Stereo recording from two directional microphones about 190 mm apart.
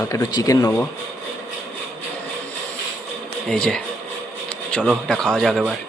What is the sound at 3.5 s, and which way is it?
Speech, 5° left (ahead or behind).